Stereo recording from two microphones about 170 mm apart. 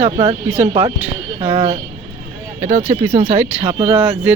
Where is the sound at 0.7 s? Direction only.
35° right (ahead or behind).